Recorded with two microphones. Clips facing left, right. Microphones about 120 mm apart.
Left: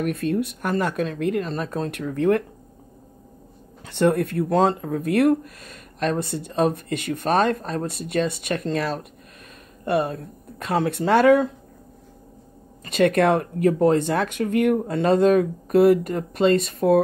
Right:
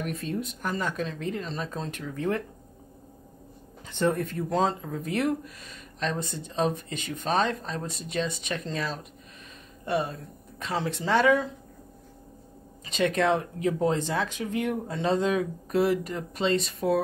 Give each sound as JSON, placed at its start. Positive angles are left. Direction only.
{"t": 0.0, "sound": "speech", "side_deg": 60}
{"t": 3.8, "sound": "speech", "side_deg": 70}
{"t": 12.8, "sound": "speech", "side_deg": 55}